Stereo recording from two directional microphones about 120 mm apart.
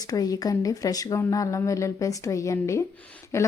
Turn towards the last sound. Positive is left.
turn(degrees=25)  # may be behind; listen again after turning